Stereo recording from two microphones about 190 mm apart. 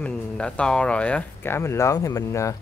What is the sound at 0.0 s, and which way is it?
Speech, 5° left (ahead or behind).